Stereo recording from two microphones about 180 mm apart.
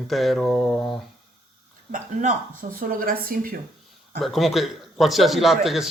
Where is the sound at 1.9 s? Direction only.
50° right (ahead or behind).